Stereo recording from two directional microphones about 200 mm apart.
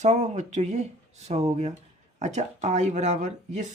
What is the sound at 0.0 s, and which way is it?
Speech, 35° right (ahead or behind).